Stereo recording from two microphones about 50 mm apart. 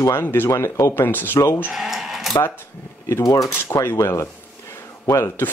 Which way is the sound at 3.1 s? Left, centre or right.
Left.